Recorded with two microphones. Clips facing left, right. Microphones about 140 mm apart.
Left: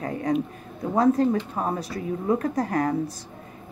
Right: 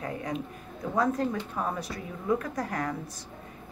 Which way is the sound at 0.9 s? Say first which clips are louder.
Left 7 dB; 35° left (ahead or behind).